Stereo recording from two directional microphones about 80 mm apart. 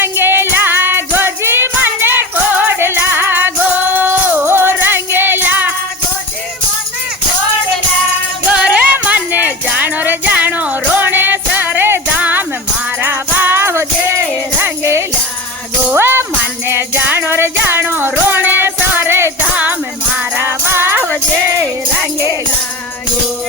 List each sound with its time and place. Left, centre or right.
0.0 s music: right
8.5 s music: centre; by 15.0 s right
16.0 s jingle bell: right
16.6 s music: right